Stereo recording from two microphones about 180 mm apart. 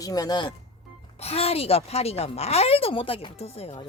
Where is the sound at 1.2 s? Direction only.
35° left (ahead or behind).